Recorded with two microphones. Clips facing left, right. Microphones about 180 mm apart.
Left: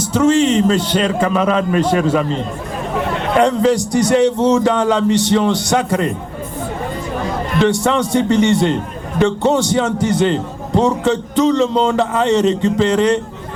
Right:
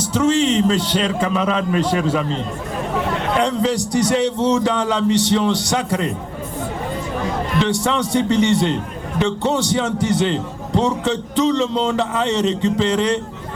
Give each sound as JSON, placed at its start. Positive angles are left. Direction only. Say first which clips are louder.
{"t": 0.1, "sound": "a man's voice", "louder": "left 4 dB", "side_deg": 50}
{"t": 7.6, "sound": "a man's voice", "louder": "left 6 dB", "side_deg": 50}